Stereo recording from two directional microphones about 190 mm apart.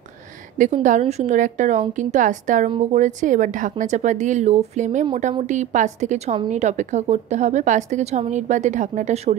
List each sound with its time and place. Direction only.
0.8 s a woman's voice: 40° right (ahead or behind)